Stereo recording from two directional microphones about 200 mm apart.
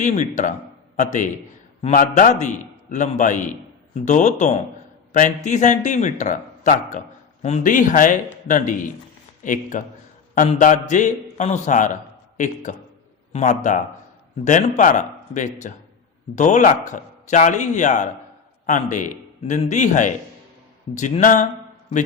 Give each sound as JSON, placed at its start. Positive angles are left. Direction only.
{"t": 0.0, "sound": "a man's voice", "side_deg": 35}